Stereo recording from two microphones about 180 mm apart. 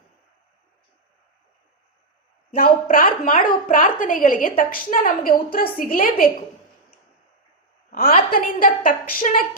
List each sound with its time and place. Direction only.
2.9 s a woman's voice: 50° left (ahead or behind)
7.9 s a sound: 55° left (ahead or behind)
8.3 s a woman's voice: 50° left (ahead or behind)